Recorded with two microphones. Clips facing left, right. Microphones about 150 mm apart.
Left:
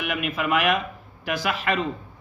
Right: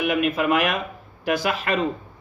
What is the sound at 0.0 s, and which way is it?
Speech, 35° right (ahead or behind).